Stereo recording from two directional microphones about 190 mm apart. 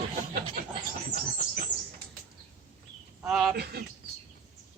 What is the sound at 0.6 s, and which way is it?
Speech, 45° right (ahead or behind).